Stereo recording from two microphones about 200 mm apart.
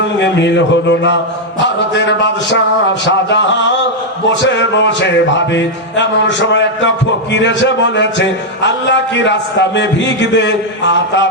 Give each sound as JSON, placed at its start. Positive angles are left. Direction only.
{"t": 0.2, "sound": "a man's voice", "side_deg": 60}